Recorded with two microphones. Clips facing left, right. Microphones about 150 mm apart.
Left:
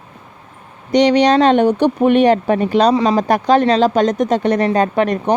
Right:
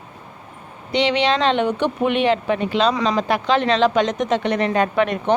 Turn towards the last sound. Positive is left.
turn(degrees=40)  # may be behind; listen again after turning